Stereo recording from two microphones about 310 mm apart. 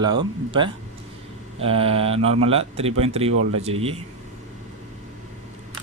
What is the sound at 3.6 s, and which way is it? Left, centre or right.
Speech, centre.